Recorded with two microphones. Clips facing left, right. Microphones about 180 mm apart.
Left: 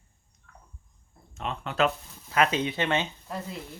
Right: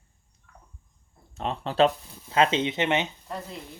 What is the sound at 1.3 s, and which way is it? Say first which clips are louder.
Speech: right 3 dB; 35° right (ahead or behind).